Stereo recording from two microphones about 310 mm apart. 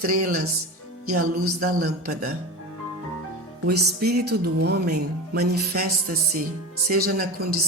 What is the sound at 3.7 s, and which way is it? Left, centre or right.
Music, right.